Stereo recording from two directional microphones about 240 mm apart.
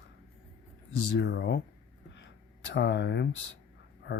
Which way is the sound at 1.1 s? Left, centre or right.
Left.